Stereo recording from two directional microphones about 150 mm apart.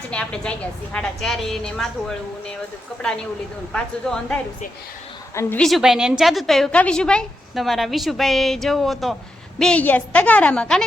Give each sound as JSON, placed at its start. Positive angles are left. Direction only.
{"t": 0.1, "sound": "a woman's voice", "side_deg": 5}
{"t": 5.3, "sound": "a woman's voice", "side_deg": 20}
{"t": 5.5, "sound": "a woman's voice", "side_deg": 0}